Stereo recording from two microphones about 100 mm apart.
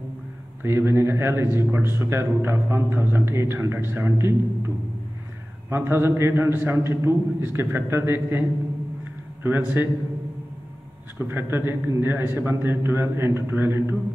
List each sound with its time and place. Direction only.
0.6 s speech: 25° right (ahead or behind)
11.1 s speech: 20° right (ahead or behind)